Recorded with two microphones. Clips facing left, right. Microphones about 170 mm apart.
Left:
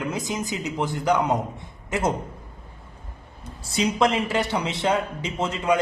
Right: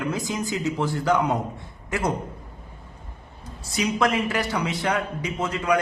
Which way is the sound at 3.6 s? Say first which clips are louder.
Left 2 dB; 25° left (ahead or behind).